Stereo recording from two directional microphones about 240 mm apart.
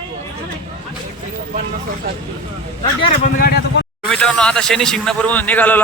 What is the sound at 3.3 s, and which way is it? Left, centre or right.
Speech, left.